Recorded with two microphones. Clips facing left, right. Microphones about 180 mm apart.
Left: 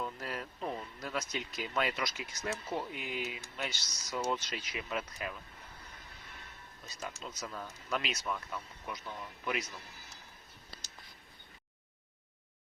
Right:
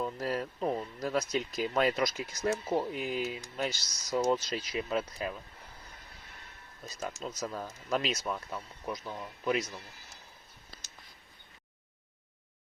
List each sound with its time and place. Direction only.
0.0 s speech: 40° right (ahead or behind)
6.8 s speech: 40° right (ahead or behind)